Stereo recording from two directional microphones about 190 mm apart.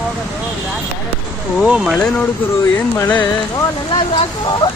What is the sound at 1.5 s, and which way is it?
Speech, 5° right (ahead or behind).